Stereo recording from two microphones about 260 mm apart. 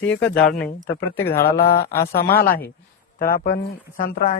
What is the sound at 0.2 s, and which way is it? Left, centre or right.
Speech, left.